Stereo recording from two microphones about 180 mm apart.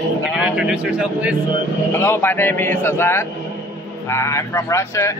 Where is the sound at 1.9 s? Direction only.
15° left (ahead or behind).